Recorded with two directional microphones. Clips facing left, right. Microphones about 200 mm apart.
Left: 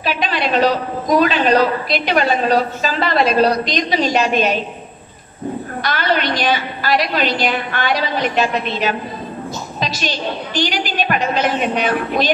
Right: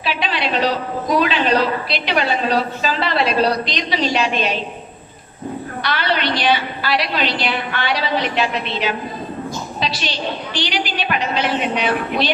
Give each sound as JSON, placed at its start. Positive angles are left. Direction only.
{"t": 0.0, "sound": "a woman's voice", "side_deg": 45}
{"t": 5.8, "sound": "a woman's voice", "side_deg": 45}